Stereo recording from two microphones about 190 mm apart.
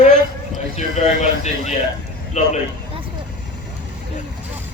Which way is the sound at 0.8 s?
35° left (ahead or behind).